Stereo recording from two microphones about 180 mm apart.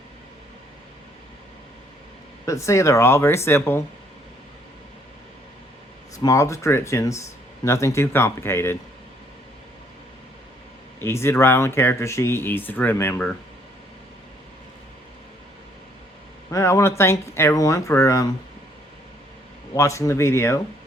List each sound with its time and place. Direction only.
2.5 s speech: 15° left (ahead or behind)
6.1 s speech: 20° left (ahead or behind)
11.0 s speech: 15° left (ahead or behind)
16.5 s speech: 15° left (ahead or behind)
19.7 s speech: 15° left (ahead or behind)